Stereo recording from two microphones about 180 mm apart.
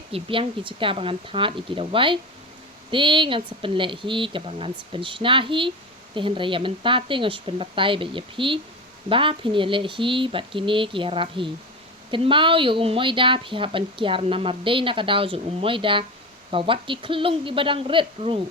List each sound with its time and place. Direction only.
0.1 s a woman's voice: 30° right (ahead or behind)